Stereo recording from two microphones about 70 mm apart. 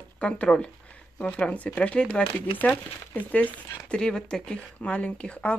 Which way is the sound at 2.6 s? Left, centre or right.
Left.